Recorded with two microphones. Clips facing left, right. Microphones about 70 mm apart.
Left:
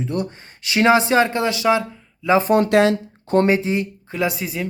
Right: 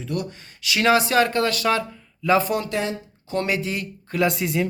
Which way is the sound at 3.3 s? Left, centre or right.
Left.